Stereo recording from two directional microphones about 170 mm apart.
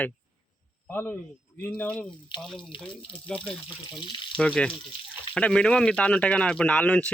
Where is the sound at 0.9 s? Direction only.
10° left (ahead or behind).